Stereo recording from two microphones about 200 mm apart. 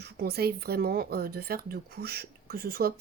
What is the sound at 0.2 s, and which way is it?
Speech, 50° right (ahead or behind).